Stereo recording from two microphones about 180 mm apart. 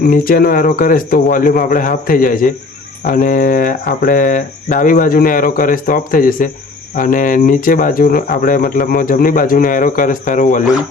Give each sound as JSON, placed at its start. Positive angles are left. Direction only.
{"t": 0.1, "sound": "speech", "side_deg": 55}